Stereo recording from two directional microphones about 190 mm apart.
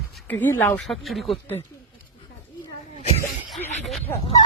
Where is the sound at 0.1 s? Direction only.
5° left (ahead or behind).